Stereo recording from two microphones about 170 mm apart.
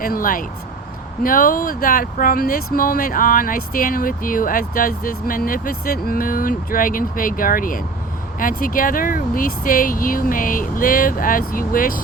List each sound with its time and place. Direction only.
0.0 s speech: 55° left (ahead or behind)